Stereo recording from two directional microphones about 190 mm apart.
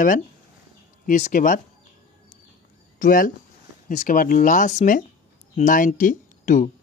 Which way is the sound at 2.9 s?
45° left (ahead or behind).